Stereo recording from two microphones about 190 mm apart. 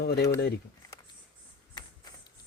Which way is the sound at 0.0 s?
60° left (ahead or behind).